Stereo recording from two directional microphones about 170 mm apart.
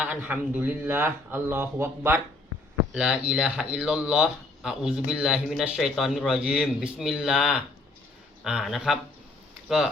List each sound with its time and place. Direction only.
0.0 s speech: 10° right (ahead or behind)